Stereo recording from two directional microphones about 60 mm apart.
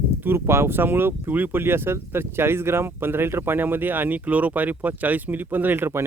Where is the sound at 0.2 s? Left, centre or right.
Right.